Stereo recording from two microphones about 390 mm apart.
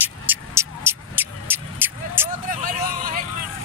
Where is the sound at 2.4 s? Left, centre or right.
Right.